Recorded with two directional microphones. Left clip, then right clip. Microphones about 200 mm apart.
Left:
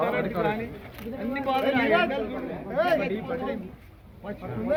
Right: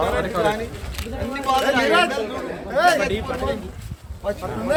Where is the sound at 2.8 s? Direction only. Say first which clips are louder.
Right 9 dB; 65° right (ahead or behind).